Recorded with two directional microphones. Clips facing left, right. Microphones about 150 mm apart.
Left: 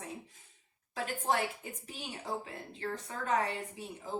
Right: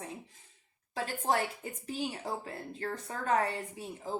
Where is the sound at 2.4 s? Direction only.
40° right (ahead or behind).